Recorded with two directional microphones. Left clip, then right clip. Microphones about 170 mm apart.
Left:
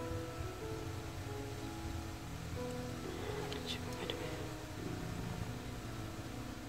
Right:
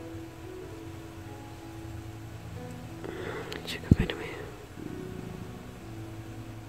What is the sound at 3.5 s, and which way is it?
Whispering, 45° right (ahead or behind).